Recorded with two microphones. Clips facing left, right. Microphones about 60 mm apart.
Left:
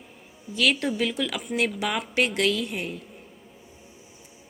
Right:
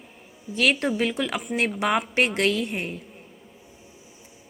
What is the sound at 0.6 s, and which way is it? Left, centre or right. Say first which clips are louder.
Speech: right 2 dB; right.